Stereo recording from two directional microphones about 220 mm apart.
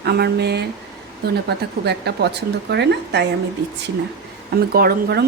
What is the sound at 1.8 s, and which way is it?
Speech, 50° right (ahead or behind).